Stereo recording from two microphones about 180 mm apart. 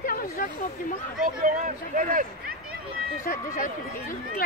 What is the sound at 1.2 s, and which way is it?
Speech, 45° right (ahead or behind).